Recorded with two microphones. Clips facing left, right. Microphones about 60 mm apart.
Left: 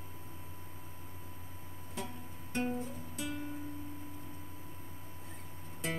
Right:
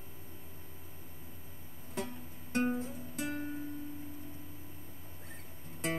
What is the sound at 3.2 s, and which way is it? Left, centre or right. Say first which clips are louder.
Music: right 3 dB; right.